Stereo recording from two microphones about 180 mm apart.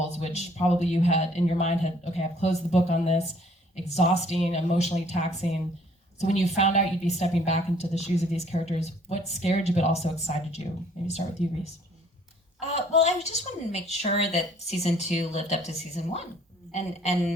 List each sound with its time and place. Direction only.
0.1 s a sound: 40° left (ahead or behind)
0.8 s a woman's voice: 35° left (ahead or behind)
11.4 s speech: centre (ahead or behind)
12.6 s a woman's voice: 35° left (ahead or behind)